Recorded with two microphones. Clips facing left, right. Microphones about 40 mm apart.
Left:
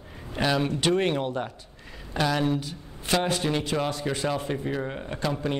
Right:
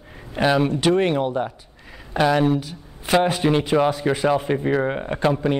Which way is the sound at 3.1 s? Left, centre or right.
Centre.